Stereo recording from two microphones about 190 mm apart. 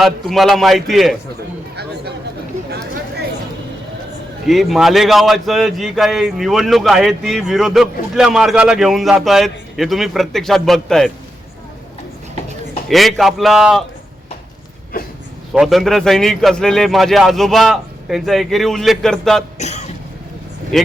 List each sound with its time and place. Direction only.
0.0 s a man's voice: centre (ahead or behind)
1.7 s speech: 60° right (ahead or behind)
4.4 s a man's voice: centre (ahead or behind)
12.9 s a man's voice: centre (ahead or behind)
14.9 s a sound: 50° left (ahead or behind)
15.5 s a man's voice: centre (ahead or behind)
19.5 s speech: 35° left (ahead or behind)
20.7 s a man's voice: centre (ahead or behind)